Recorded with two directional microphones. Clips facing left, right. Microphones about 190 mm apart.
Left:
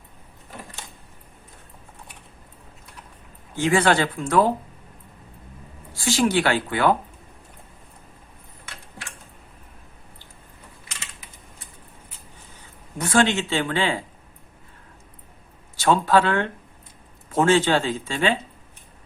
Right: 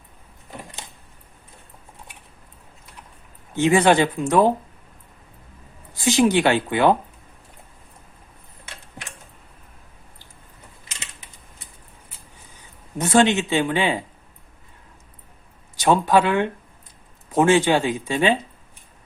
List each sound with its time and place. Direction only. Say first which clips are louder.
3.5 s speech: right 3 dB; 20° right (ahead or behind)
5.9 s speech: right 3 dB; 20° right (ahead or behind)
13.0 s speech: right 3 dB; 20° right (ahead or behind)
15.7 s speech: right 1 dB; 15° right (ahead or behind)